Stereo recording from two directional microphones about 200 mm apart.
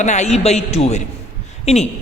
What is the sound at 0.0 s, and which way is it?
A woman's voice, 35° left (ahead or behind).